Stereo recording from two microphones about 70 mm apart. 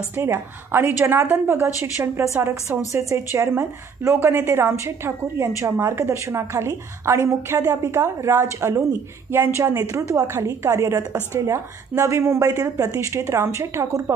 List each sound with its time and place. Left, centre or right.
0.1 s a woman's voice: right
9.3 s a woman's voice: right
10.2 s a woman's voice: right
12.4 s a woman's voice: right